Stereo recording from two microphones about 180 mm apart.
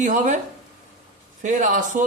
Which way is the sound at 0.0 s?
45° right (ahead or behind).